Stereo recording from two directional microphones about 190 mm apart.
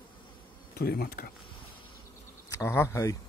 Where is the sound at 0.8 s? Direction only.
55° left (ahead or behind).